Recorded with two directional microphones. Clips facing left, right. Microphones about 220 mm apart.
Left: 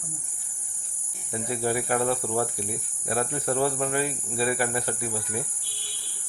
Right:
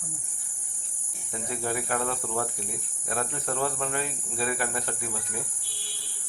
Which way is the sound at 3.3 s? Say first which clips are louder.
Left 5 dB; 15° left (ahead or behind).